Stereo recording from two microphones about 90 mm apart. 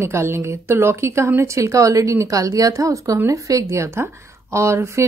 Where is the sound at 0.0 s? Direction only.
30° right (ahead or behind).